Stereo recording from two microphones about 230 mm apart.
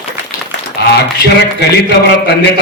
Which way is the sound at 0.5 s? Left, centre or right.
Left.